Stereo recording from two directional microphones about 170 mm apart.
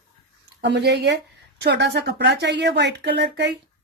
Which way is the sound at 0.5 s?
85° right.